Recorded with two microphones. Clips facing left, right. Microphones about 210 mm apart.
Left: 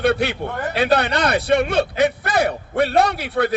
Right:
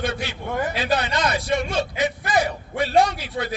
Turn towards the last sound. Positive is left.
turn(degrees=60)  # may be behind; listen again after turning